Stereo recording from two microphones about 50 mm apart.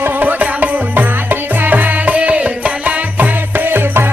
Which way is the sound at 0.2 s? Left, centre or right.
Right.